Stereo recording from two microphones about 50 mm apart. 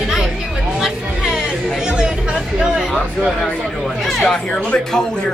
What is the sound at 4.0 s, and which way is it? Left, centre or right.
Speech, centre.